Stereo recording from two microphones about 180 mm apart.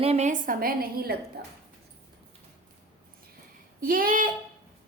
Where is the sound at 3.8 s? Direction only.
50° right (ahead or behind).